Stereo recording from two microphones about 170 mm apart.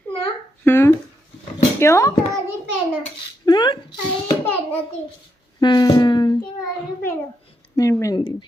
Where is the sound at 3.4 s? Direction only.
25° left (ahead or behind).